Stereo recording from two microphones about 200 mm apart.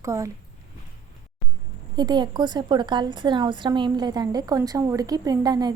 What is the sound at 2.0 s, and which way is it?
A woman's voice, 20° right (ahead or behind).